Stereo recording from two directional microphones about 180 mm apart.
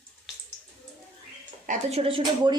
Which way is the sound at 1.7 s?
35° right (ahead or behind).